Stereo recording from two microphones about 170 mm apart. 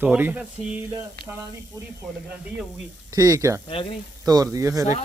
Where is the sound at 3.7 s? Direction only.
30° left (ahead or behind).